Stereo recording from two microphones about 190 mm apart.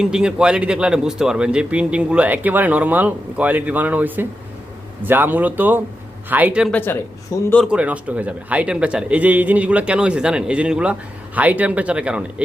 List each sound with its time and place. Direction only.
0.0 s a man's voice: 5° right (ahead or behind)
6.7 s speech: 10° left (ahead or behind)
7.5 s a man's voice: centre (ahead or behind)